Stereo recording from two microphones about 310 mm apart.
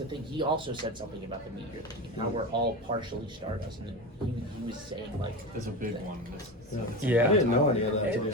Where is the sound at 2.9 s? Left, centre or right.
Centre.